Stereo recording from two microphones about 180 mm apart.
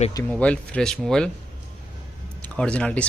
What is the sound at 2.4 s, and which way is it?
Speech, 5° left (ahead or behind).